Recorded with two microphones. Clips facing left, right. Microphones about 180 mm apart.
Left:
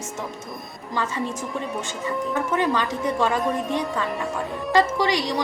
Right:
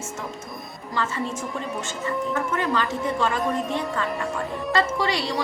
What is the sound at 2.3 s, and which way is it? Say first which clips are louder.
Speech: left 1 dB; centre (ahead or behind).